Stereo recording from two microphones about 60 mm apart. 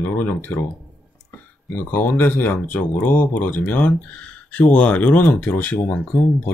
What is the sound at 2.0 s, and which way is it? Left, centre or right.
Speech, left.